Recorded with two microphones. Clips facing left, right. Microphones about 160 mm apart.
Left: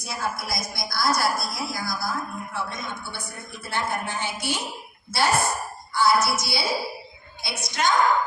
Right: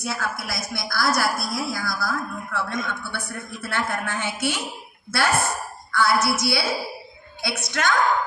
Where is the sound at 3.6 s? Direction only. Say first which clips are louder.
Right 1 dB; 75° right (ahead or behind).